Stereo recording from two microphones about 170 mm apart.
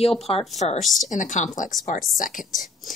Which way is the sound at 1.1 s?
45° left (ahead or behind).